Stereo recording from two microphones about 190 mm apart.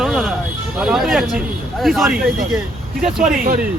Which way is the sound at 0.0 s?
Centre (ahead or behind).